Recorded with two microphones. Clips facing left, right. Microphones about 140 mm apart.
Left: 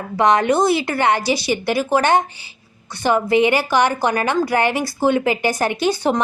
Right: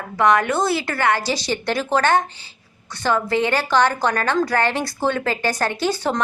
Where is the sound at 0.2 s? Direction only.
20° left (ahead or behind).